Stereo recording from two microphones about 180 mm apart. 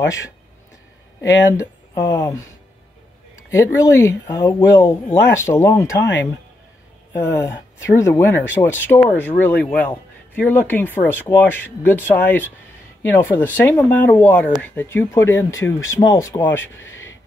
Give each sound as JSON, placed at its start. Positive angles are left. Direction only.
{"t": 1.3, "sound": "speech", "side_deg": 15}
{"t": 3.5, "sound": "speech", "side_deg": 15}
{"t": 7.2, "sound": "speech", "side_deg": 15}